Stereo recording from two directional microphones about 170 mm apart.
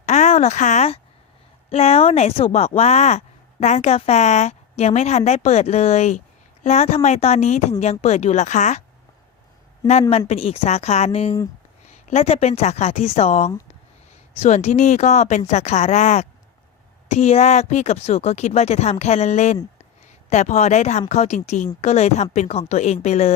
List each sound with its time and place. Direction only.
0.0 s a sound: 40° left (ahead or behind)
1.7 s a woman's voice: 35° left (ahead or behind)
9.8 s a woman's voice: 40° left (ahead or behind)